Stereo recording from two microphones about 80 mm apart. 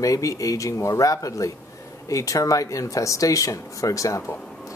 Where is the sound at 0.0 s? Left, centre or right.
Left.